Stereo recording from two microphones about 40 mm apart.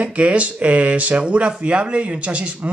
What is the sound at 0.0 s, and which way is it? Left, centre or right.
Speech, right.